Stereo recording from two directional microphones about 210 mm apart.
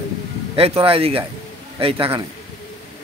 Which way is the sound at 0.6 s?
25° right (ahead or behind).